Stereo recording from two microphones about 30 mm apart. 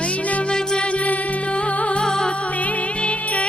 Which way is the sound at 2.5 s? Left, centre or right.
Left.